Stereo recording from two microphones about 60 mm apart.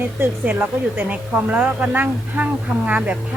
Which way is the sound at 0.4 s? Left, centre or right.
Right.